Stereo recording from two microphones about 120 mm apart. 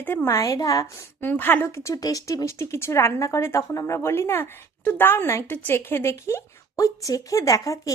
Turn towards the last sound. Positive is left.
turn(degrees=30)  # may be behind; listen again after turning